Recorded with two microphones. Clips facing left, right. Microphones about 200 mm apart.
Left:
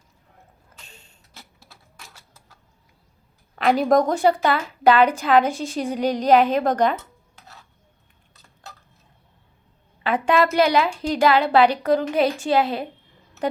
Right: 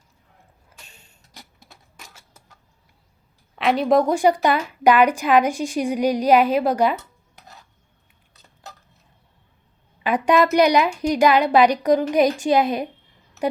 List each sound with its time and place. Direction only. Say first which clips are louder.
1.3 s a sound: right 2 dB; 15° right (ahead or behind)
3.5 s a woman's voice: even; centre (ahead or behind)
10.0 s a woman's voice: right 2 dB; 15° right (ahead or behind)